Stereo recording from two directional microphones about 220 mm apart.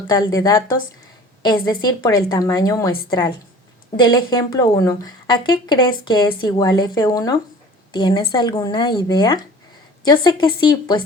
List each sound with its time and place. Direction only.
0.1 s speech: 15° left (ahead or behind)
3.9 s speech: 20° left (ahead or behind)